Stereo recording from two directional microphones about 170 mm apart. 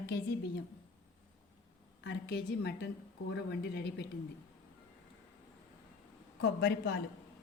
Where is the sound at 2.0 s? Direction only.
80° left.